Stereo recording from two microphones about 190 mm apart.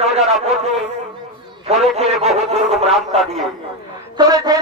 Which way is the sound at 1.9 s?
35° right (ahead or behind).